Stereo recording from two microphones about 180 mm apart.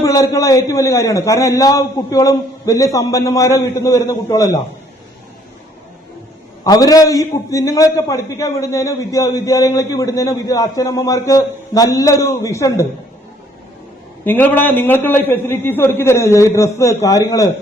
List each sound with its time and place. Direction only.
0.0 s a man's voice: 20° left (ahead or behind)
6.7 s a man's voice: 20° left (ahead or behind)
14.3 s a man's voice: 10° left (ahead or behind)